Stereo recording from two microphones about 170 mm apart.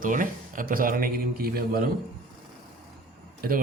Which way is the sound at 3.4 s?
60° right (ahead or behind).